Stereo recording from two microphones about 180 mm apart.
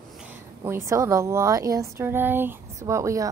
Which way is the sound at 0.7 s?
15° right (ahead or behind).